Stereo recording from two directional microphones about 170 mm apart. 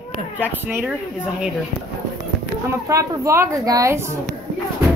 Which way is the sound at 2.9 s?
20° right (ahead or behind).